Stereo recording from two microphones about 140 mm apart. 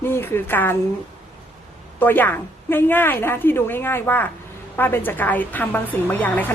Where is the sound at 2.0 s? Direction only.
15° left (ahead or behind).